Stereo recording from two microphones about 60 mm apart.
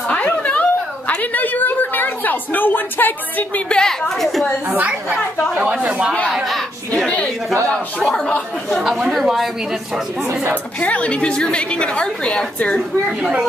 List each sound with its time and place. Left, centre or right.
0.1 s a sound: left
3.6 s a woman's voice: centre
4.1 s speech: centre
4.6 s speech: right
6.3 s a woman's voice: centre
8.6 s speech: centre
10.8 s a woman's voice: left